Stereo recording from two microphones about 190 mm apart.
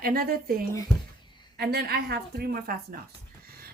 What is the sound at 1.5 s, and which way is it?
Speech, 55° right (ahead or behind).